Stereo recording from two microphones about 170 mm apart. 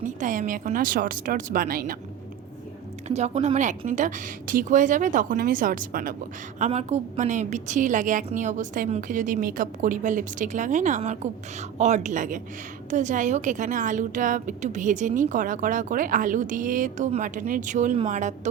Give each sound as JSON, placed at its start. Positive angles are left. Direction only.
{"t": 0.0, "sound": "a woman's voice", "side_deg": -50}
{"t": 3.1, "sound": "a woman's voice", "side_deg": -40}
{"t": 6.6, "sound": "a woman's voice", "side_deg": -40}